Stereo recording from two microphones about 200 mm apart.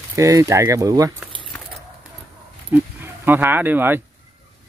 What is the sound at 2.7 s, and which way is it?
Speech, 10° right (ahead or behind).